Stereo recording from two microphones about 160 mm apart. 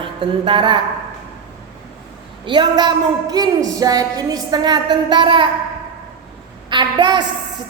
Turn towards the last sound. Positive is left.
turn(degrees=-30)  # may be behind; listen again after turning